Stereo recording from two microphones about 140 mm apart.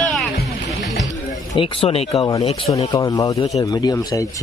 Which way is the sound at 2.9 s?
25° left (ahead or behind).